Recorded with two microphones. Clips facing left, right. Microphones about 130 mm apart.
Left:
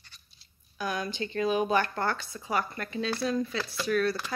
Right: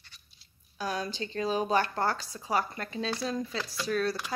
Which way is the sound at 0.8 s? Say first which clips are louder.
Left 1 dB; 35° right (ahead or behind).